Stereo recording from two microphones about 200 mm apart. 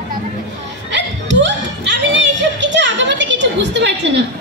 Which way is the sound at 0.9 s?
65° right (ahead or behind).